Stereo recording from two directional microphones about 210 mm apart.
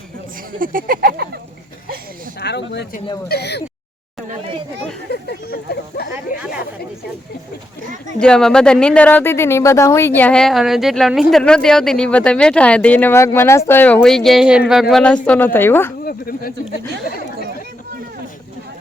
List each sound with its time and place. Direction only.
0.6 s a sound: 40° right (ahead or behind)
2.4 s speech: 55° left (ahead or behind)
5.0 s speech: 50° left (ahead or behind)
8.2 s speech: 5° left (ahead or behind)
16.0 s speech: 45° left (ahead or behind)